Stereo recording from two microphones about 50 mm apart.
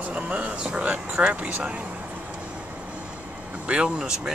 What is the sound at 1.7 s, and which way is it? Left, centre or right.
Vehicle, right.